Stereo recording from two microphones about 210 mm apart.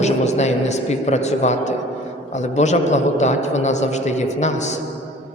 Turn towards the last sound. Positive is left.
turn(degrees=35)  # may be behind; listen again after turning